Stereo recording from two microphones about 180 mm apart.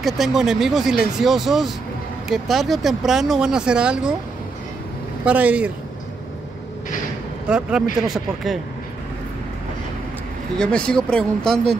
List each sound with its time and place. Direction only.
0.0 s speech: centre (ahead or behind)
5.2 s speech: 10° right (ahead or behind)
7.4 s speech: 5° right (ahead or behind)
10.6 s speech: 5° left (ahead or behind)